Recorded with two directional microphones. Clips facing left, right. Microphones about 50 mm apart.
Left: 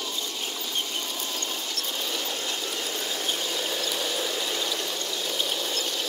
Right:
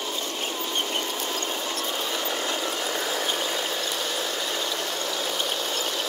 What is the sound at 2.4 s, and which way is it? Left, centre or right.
Vehicle, right.